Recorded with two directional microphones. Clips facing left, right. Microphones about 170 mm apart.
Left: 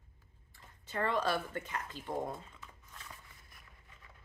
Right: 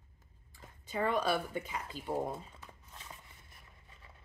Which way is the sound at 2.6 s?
25° right (ahead or behind).